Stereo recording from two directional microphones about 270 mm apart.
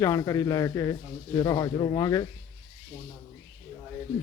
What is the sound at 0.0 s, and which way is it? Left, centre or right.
Speech, centre.